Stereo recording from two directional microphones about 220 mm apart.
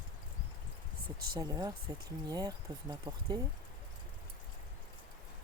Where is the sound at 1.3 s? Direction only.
20° right (ahead or behind).